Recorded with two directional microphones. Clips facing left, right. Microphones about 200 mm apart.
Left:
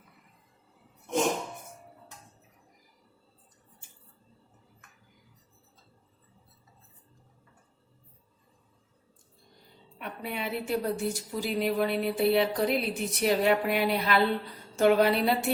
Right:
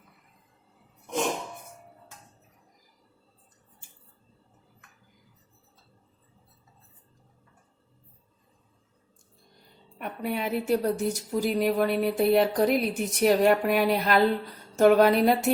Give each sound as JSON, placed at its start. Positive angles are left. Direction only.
{"t": 10.0, "sound": "a woman's voice", "side_deg": -45}